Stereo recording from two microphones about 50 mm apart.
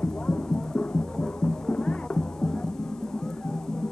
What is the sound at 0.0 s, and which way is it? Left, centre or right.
Music, centre.